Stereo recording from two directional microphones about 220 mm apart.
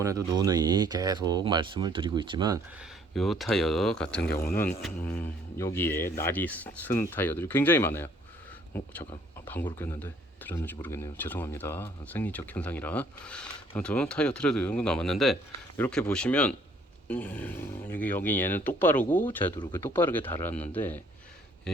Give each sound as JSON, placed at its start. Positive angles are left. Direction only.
{"t": 0.0, "sound": "speech", "side_deg": -15}
{"t": 3.2, "sound": "speech", "side_deg": 0}